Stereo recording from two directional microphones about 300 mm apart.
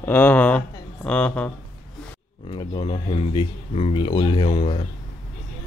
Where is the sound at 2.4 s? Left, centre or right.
Centre.